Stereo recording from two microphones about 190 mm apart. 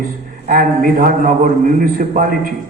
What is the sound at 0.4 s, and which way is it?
A man's voice, 50° right (ahead or behind).